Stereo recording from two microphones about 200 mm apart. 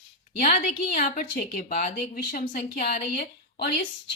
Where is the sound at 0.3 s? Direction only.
40° left (ahead or behind).